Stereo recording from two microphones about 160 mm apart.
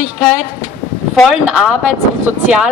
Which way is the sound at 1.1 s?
Centre (ahead or behind).